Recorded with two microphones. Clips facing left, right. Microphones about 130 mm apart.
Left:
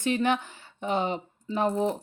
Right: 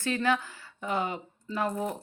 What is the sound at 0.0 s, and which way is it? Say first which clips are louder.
A woman's voice: left 2 dB; 20° left (ahead or behind).